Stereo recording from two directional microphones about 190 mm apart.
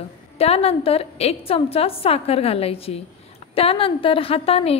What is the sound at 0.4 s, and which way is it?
A woman's voice, 30° left (ahead or behind).